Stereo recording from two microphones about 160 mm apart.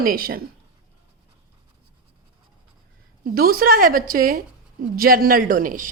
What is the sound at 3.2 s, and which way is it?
Speech, 65° right (ahead or behind).